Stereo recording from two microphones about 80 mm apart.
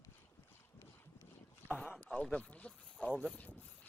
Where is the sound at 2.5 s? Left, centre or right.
Centre.